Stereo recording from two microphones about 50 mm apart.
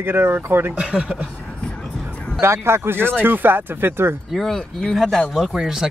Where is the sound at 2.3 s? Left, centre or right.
Right.